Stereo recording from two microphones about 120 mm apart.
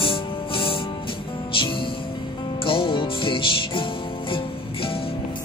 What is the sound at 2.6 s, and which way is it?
Music, 45° left (ahead or behind).